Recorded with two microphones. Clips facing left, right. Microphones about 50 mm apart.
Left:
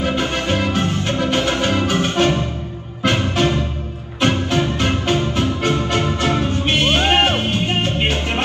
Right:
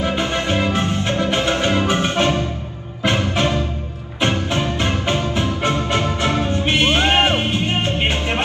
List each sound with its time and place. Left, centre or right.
0.1 s music: right